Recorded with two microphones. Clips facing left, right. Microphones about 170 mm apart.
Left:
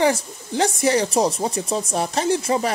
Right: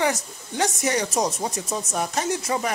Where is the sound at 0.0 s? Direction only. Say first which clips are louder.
Left 5 dB; 30° left (ahead or behind).